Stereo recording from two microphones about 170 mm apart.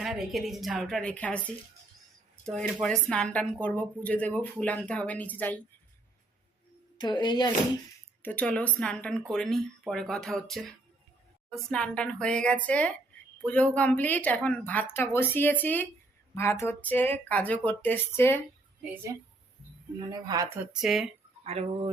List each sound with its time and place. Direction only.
0.0 s a woman's voice: centre (ahead or behind)
7.0 s speech: 25° left (ahead or behind)
8.2 s a woman's voice: 10° left (ahead or behind)
20.0 s speech: 20° right (ahead or behind)
20.7 s a woman's voice: 5° right (ahead or behind)
21.4 s speech: 35° right (ahead or behind)